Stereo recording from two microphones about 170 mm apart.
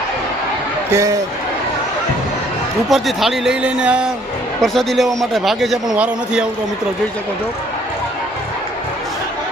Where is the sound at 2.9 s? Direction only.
Centre (ahead or behind).